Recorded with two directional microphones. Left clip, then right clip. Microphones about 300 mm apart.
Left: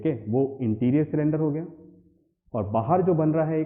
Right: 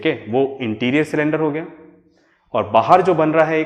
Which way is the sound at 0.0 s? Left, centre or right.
Centre.